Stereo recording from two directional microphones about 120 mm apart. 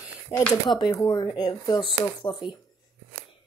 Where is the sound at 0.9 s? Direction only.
25° left (ahead or behind).